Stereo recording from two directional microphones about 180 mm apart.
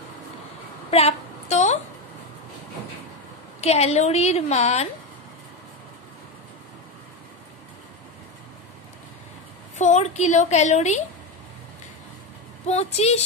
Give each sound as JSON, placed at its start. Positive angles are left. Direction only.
{"t": 0.8, "sound": "a sound", "side_deg": 35}
{"t": 3.6, "sound": "a woman's voice", "side_deg": 35}
{"t": 9.8, "sound": "a woman's voice", "side_deg": 40}
{"t": 12.6, "sound": "a woman's voice", "side_deg": 35}